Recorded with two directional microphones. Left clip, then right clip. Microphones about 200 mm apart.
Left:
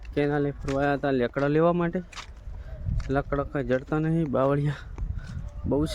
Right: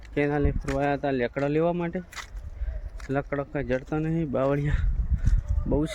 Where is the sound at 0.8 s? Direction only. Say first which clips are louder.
Left 1 dB; 25° left (ahead or behind).